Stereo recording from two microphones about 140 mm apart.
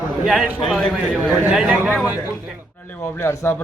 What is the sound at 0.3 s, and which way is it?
A man's voice, centre (ahead or behind).